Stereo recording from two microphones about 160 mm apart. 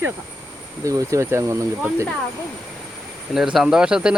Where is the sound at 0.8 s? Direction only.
20° right (ahead or behind).